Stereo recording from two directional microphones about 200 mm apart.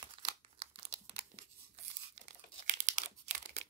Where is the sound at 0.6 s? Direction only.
30° right (ahead or behind).